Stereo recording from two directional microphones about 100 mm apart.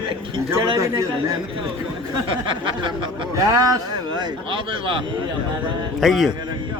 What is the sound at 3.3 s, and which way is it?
Speech, 35° right (ahead or behind).